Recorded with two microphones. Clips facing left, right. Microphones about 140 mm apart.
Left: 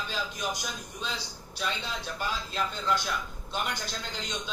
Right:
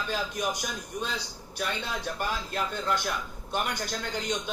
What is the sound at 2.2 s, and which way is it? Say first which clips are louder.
A man's voice: left 1 dB; 50° right (ahead or behind).